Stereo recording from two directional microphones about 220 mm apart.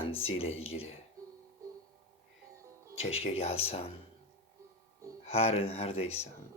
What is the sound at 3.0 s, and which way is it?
Speech, 25° left (ahead or behind).